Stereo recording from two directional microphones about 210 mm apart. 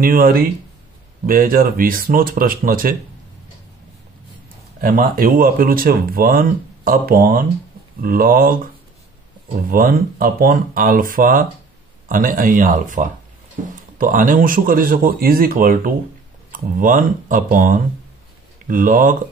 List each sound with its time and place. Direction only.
0.0 s speech: 45° right (ahead or behind)
4.8 s speech: 40° right (ahead or behind)